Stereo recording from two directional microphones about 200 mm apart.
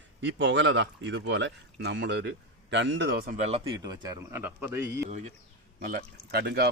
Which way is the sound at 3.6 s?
20° right (ahead or behind).